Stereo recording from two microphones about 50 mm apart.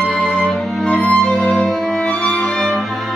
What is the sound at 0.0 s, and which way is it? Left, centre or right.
Music, centre.